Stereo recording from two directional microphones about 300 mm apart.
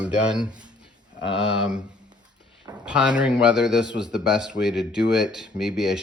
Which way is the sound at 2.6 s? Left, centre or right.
Centre.